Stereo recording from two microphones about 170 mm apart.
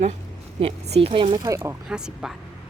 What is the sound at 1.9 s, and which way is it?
Speech, 5° right (ahead or behind).